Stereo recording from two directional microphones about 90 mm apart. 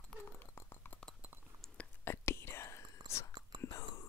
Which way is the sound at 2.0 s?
30° left (ahead or behind).